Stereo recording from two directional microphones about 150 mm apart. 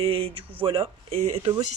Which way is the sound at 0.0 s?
40° right (ahead or behind).